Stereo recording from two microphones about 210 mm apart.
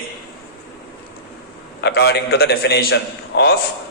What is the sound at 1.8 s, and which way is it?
A man's voice, 50° left (ahead or behind).